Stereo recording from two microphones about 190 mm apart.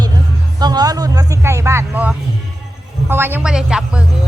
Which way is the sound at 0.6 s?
20° right (ahead or behind).